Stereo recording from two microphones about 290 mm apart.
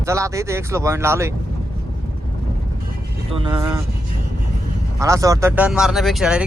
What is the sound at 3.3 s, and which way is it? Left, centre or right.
Speech, centre.